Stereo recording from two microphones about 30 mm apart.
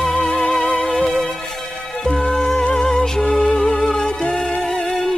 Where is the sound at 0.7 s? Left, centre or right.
Centre.